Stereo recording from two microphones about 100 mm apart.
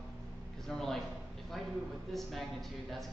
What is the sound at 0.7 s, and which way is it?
Speech, 5° left (ahead or behind).